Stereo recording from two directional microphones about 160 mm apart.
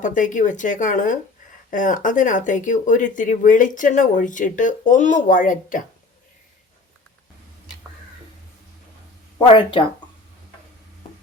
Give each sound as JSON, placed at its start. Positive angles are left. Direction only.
{"t": 0.0, "sound": "speech", "side_deg": 55}
{"t": 9.5, "sound": "speech", "side_deg": 30}